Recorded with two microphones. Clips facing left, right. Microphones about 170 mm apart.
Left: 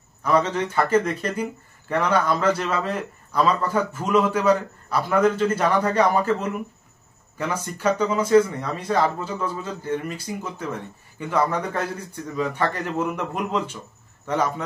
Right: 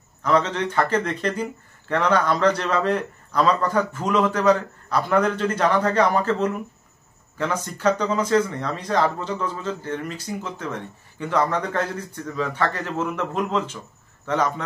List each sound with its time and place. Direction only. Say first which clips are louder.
0.2 s a man's voice: even; 10° left (ahead or behind)